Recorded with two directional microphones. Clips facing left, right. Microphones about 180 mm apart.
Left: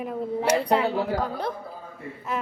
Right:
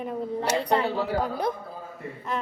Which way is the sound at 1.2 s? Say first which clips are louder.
Right 2 dB; 10° right (ahead or behind).